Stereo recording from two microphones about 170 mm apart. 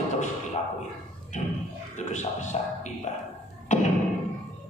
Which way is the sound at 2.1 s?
45° left (ahead or behind).